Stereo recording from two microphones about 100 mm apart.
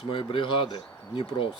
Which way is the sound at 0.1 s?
60° left (ahead or behind).